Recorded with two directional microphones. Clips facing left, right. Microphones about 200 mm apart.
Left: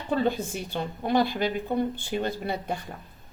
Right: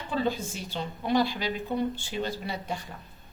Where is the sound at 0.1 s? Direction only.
55° left (ahead or behind).